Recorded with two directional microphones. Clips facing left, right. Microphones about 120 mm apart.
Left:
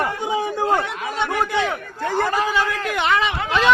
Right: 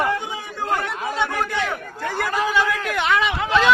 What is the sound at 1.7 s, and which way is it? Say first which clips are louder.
Speech: left 3 dB; 15° left (ahead or behind).